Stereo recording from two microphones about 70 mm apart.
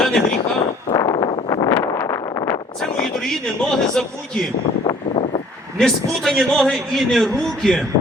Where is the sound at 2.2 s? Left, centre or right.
Left.